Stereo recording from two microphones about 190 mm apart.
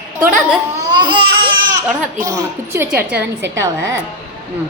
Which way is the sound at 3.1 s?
75° right (ahead or behind).